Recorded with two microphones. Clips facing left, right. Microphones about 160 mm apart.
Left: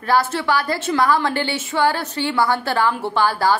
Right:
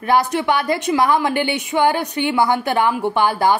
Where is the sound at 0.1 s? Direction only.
15° right (ahead or behind).